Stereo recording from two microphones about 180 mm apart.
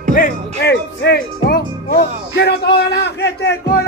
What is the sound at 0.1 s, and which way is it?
Music, 55° left (ahead or behind).